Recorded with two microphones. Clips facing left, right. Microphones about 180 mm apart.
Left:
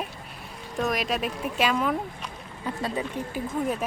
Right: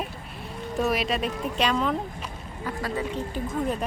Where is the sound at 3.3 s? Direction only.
5° left (ahead or behind).